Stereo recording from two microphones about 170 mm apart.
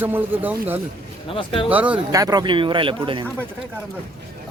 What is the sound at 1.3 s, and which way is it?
Speech, 30° left (ahead or behind).